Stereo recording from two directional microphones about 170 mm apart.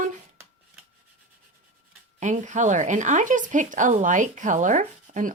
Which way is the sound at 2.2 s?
45° right (ahead or behind).